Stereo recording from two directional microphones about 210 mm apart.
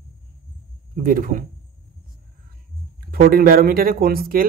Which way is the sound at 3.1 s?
45° right (ahead or behind).